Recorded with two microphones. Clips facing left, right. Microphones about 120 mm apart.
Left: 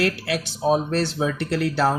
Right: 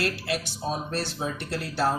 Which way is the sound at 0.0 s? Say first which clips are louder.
Left 5 dB; 70° left (ahead or behind).